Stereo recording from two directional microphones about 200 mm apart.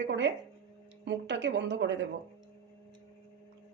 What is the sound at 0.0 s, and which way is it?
A woman's voice, 65° right (ahead or behind).